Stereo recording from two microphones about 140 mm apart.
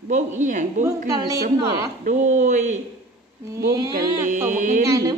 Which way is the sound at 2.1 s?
60° right (ahead or behind).